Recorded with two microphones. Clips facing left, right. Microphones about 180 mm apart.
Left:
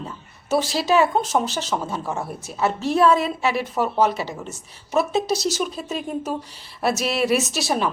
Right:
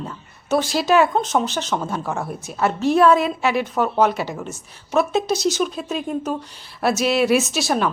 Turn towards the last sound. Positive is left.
turn(degrees=0)  # may be behind; listen again after turning